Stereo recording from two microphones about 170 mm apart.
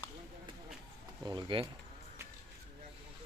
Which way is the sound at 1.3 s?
30° right (ahead or behind).